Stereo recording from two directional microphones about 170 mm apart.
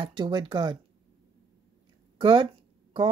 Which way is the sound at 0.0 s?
30° right (ahead or behind).